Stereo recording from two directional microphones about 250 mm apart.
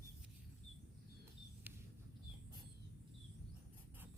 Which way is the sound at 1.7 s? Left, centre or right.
Centre.